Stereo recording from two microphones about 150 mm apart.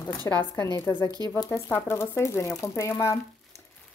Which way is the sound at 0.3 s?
20° left (ahead or behind).